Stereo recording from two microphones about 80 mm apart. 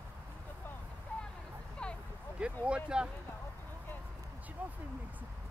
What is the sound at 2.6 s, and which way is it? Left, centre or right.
Speech, centre.